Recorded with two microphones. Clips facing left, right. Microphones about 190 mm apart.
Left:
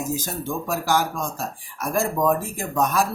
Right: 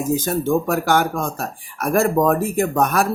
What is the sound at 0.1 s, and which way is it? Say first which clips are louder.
Speech: right 9 dB; 65° right (ahead or behind).